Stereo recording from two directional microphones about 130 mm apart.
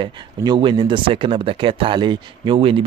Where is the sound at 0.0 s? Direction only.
35° right (ahead or behind).